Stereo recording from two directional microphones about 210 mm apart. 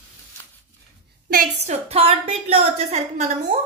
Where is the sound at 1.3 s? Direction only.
40° right (ahead or behind).